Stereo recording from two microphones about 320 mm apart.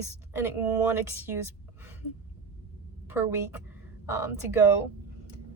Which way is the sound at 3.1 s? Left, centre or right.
Centre.